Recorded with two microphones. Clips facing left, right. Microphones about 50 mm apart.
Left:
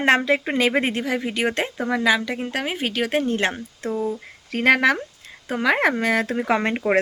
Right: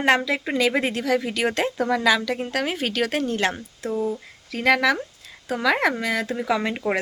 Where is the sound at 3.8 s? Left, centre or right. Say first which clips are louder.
Even; left.